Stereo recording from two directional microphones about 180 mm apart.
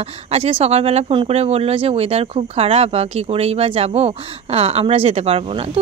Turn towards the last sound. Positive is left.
turn(degrees=-30)  # may be behind; listen again after turning